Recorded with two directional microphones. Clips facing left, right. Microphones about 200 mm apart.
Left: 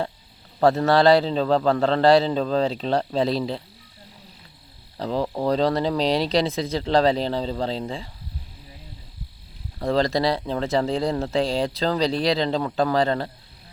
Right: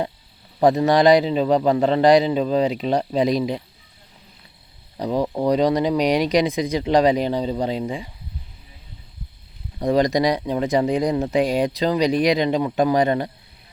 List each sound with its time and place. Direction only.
0.6 s speech: 15° right (ahead or behind)
4.9 s speech: 15° right (ahead or behind)
9.7 s speech: 15° right (ahead or behind)